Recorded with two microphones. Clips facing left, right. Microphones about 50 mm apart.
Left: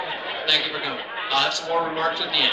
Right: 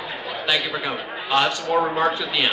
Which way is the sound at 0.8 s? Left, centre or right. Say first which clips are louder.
Right 1 dB; right.